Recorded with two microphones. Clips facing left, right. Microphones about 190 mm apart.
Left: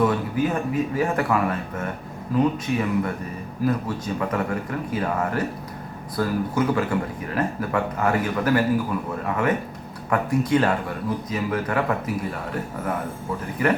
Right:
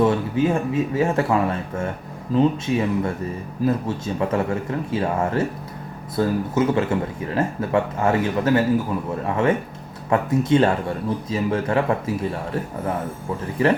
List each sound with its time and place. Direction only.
0.0 s speech: 25° right (ahead or behind)
13.6 s speech: 30° right (ahead or behind)